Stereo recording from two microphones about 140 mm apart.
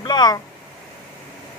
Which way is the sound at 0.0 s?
30° left (ahead or behind).